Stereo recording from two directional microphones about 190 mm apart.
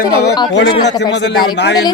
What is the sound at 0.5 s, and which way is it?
Speech, 65° left (ahead or behind).